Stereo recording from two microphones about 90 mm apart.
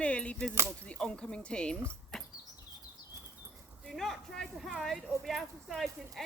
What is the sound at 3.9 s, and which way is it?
Speech, 5° left (ahead or behind).